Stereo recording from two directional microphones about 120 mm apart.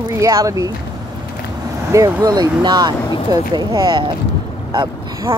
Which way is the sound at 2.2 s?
35° right (ahead or behind).